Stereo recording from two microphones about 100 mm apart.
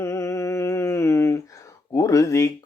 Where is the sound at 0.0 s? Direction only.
30° left (ahead or behind).